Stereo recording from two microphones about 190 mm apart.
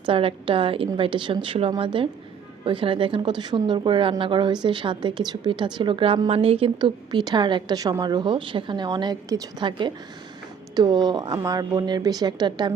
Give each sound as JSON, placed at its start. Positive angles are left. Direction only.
{"t": 0.0, "sound": "a woman's voice", "side_deg": -30}